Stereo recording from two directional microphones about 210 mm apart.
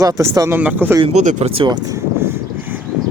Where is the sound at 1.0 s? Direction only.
30° right (ahead or behind); by 2.9 s 10° right (ahead or behind).